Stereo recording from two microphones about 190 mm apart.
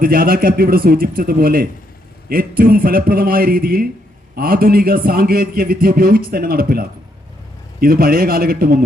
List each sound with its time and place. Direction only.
0.0 s a man's voice: 50° right (ahead or behind)